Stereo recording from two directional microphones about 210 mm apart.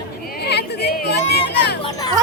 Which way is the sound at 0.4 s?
50° left (ahead or behind).